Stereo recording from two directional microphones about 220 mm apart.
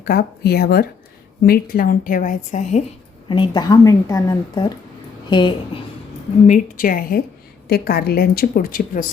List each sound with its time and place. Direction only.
0.0 s a woman's voice: 45° left (ahead or behind)
3.2 s a woman's voice: 20° left (ahead or behind)
6.5 s a woman's voice: 40° left (ahead or behind)